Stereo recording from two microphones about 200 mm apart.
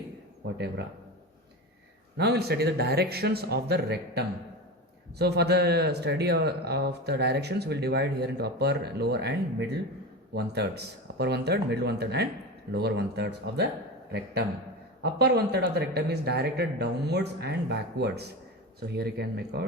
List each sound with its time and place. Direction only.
0.4 s a man's voice: 60° right (ahead or behind)
2.1 s speech: 55° right (ahead or behind)
15.0 s speech: 55° right (ahead or behind)